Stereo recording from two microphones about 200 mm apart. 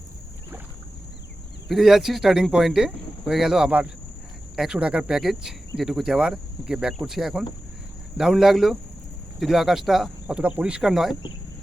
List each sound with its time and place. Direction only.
1.6 s speech: centre (ahead or behind)